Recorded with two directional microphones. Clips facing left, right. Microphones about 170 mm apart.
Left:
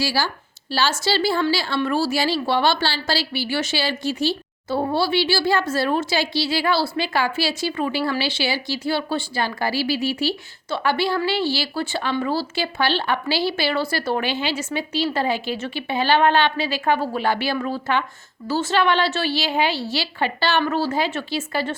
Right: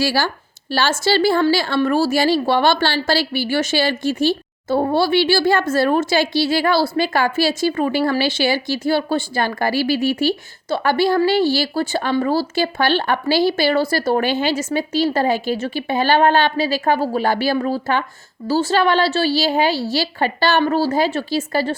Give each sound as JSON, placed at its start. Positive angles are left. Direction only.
{"t": 0.0, "sound": "a woman's voice", "side_deg": -55}